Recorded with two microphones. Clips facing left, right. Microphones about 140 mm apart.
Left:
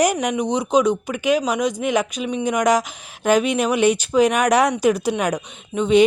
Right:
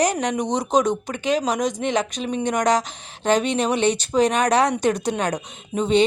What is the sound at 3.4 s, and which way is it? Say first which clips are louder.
Speech: left 2 dB; 30° right (ahead or behind).